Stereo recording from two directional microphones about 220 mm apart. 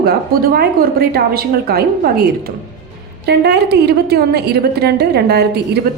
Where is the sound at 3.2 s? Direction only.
50° right (ahead or behind).